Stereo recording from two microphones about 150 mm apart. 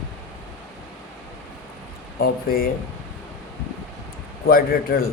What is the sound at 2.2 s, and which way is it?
Speech, 75° left (ahead or behind).